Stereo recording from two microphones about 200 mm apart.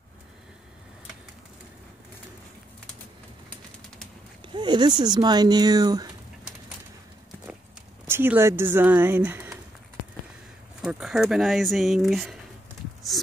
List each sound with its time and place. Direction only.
4.6 s speech: 20° right (ahead or behind)
8.1 s speech: 10° right (ahead or behind)
10.8 s speech: centre (ahead or behind)